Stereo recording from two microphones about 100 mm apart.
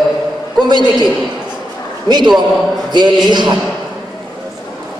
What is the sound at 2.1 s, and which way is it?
A man's voice, 50° right (ahead or behind).